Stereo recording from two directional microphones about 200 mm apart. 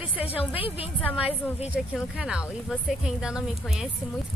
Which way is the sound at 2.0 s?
5° right (ahead or behind).